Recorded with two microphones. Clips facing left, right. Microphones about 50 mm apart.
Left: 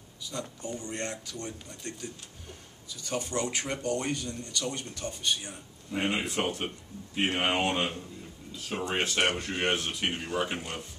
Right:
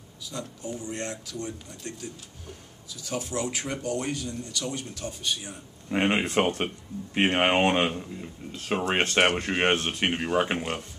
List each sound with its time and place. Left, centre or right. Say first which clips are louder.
0.2 s speech: right 1 dB; centre
5.9 s speech: right 5 dB; right
9.4 s speech: right 5 dB; right